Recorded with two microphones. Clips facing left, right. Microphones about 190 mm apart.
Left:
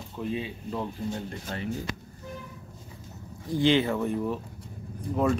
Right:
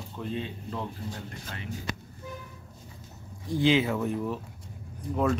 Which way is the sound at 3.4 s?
Centre (ahead or behind).